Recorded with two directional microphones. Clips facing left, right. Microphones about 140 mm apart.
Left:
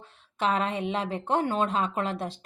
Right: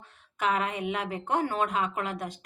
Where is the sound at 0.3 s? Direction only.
30° left (ahead or behind).